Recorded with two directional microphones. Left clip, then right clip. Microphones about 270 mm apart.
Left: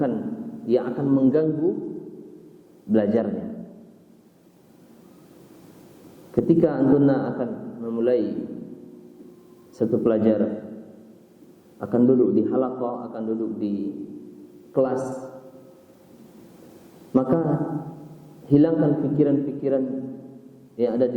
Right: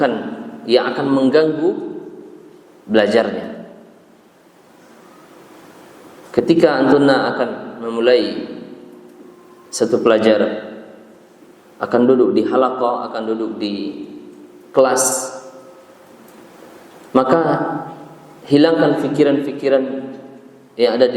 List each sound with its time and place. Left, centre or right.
0.0 s a man's voice: centre
1.6 s a man's voice: centre
2.9 s a man's voice: centre
6.3 s a man's voice: centre
9.9 s a man's voice: centre
15.1 s a sound: centre
17.1 s a man's voice: centre